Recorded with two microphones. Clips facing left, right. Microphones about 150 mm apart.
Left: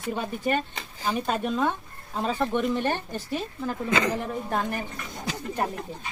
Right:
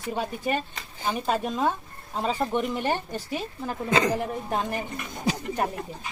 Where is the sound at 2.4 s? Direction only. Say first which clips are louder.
Left 3 dB; 10° right (ahead or behind).